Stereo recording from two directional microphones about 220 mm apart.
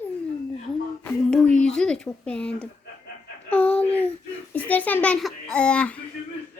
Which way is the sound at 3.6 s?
25° left (ahead or behind).